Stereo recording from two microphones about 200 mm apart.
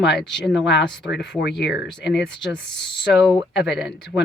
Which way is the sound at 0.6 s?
60° left (ahead or behind).